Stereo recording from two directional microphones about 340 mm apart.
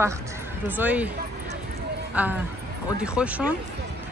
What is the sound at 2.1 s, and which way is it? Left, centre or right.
Speech, centre.